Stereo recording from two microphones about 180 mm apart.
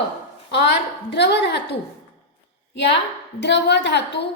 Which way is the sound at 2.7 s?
80° left.